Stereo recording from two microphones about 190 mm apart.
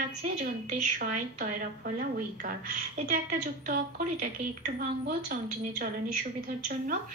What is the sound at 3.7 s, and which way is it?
A woman's voice, 45° right (ahead or behind).